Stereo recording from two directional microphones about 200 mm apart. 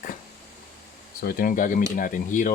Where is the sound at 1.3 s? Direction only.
45° left (ahead or behind).